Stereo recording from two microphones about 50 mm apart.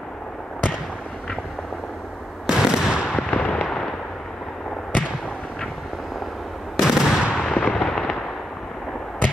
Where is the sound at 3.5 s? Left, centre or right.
Centre.